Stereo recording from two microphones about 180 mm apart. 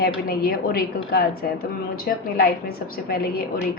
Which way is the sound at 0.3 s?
55° left (ahead or behind).